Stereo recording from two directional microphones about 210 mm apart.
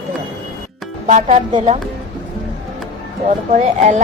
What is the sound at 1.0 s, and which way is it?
Speech, 35° right (ahead or behind).